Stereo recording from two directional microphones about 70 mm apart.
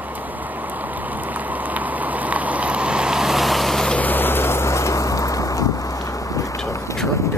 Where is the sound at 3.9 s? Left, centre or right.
Left.